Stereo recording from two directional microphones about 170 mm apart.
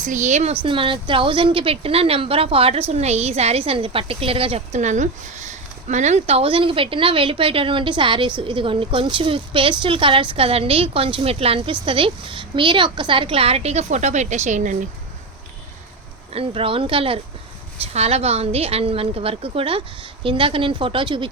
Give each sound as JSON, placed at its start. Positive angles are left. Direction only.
{"t": 0.0, "sound": "speech", "side_deg": -45}
{"t": 0.6, "sound": "a woman's voice", "side_deg": -30}
{"t": 16.3, "sound": "a woman's voice", "side_deg": -35}